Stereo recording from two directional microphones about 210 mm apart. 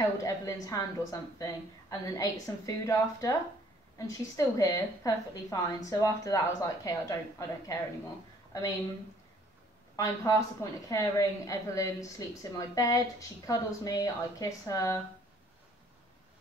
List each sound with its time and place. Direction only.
0.0 s a woman's voice: 15° left (ahead or behind)
9.9 s a woman's voice: 15° left (ahead or behind)